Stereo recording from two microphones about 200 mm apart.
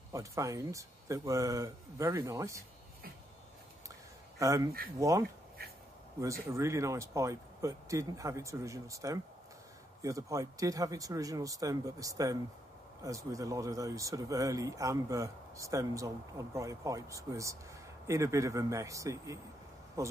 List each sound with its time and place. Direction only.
0.1 s speech: 15° right (ahead or behind)
4.4 s speech: 15° right (ahead or behind)
5.6 s duck: 50° right (ahead or behind)
6.2 s speech: 15° right (ahead or behind)